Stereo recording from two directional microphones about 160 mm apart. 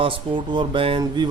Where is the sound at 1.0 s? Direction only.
25° right (ahead or behind).